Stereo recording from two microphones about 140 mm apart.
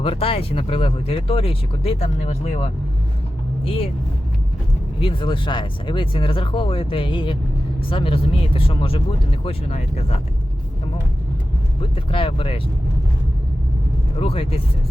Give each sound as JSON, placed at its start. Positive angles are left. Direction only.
{"t": 0.0, "sound": "speech", "side_deg": 40}
{"t": 3.6, "sound": "speech", "side_deg": 40}
{"t": 4.9, "sound": "speech", "side_deg": 40}
{"t": 11.8, "sound": "speech", "side_deg": 40}
{"t": 14.2, "sound": "speech", "side_deg": 45}